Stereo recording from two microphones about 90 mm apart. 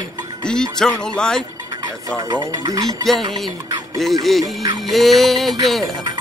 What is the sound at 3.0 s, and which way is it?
Music, centre (ahead or behind).